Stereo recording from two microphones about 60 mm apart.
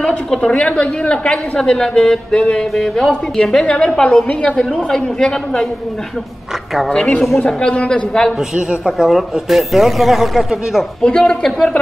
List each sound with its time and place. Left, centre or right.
0.0 s a woman's voice: centre
6.9 s a woman's voice: centre
8.4 s speech: centre
11.0 s a woman's voice: centre